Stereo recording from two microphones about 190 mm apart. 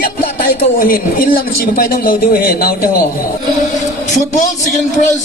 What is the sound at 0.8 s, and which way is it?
A man's voice, 50° left (ahead or behind).